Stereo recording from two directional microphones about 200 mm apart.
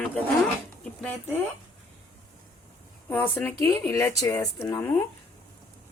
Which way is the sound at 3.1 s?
10° left (ahead or behind).